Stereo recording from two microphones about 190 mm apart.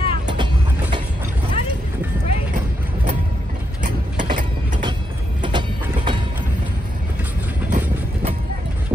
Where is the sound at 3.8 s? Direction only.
45° right (ahead or behind).